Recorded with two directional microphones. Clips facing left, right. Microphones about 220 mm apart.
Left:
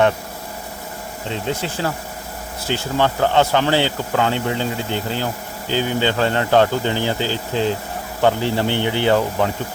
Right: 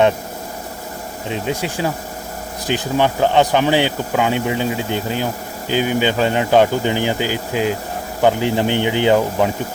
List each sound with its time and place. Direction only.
1.3 s speech: 15° right (ahead or behind)